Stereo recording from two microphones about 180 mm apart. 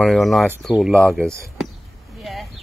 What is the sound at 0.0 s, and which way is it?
Speech, centre (ahead or behind).